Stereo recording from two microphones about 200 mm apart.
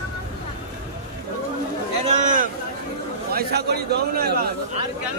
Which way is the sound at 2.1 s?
40° right (ahead or behind).